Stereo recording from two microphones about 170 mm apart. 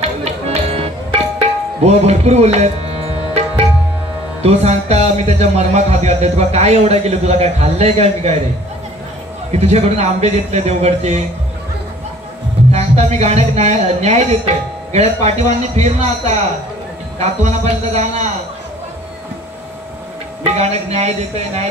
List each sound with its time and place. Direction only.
0.2 s music: 40° right (ahead or behind)
4.4 s a man's voice: 40° right (ahead or behind)
9.5 s a man's voice: 40° right (ahead or behind)
12.7 s a man's voice: 40° right (ahead or behind)
20.4 s a man's voice: 40° right (ahead or behind)